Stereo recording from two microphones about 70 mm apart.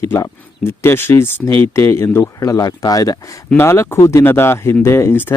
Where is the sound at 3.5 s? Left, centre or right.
Left.